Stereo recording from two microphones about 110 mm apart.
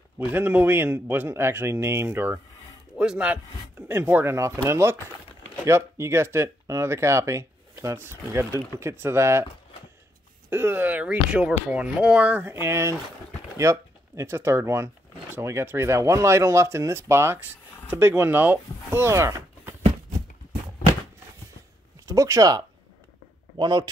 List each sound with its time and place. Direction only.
0.3 s speech: 20° right (ahead or behind)
10.5 s speech: 20° right (ahead or behind)
12.6 s speech: 25° right (ahead or behind)
22.0 s speech: 30° right (ahead or behind)
23.6 s speech: 40° right (ahead or behind)